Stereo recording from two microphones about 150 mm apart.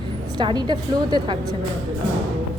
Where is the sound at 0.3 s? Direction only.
30° right (ahead or behind).